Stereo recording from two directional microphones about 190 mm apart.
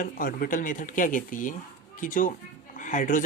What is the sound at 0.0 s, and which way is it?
Speech, 45° left (ahead or behind).